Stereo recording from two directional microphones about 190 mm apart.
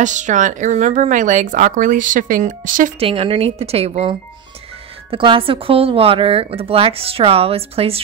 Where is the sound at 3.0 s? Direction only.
30° right (ahead or behind).